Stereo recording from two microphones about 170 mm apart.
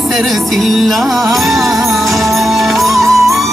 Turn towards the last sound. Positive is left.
turn(degrees=0)  # may be behind; listen again after turning